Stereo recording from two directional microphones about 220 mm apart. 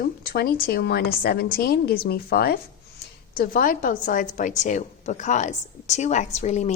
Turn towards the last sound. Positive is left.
turn(degrees=30)  # may be behind; listen again after turning